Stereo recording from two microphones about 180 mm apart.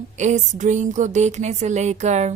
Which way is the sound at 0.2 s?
40° right (ahead or behind).